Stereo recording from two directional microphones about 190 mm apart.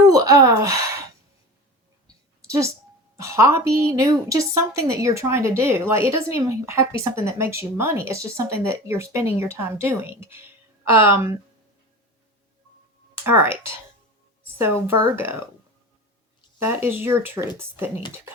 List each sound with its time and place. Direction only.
0.0 s a sound: 20° right (ahead or behind)
2.5 s a woman's voice: 15° right (ahead or behind)
13.2 s a woman's voice: 10° right (ahead or behind)
14.6 s a woman's voice: 10° right (ahead or behind)
16.6 s a woman's voice: 10° right (ahead or behind)